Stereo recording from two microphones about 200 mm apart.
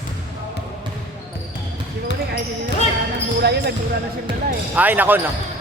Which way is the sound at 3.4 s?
55° right (ahead or behind).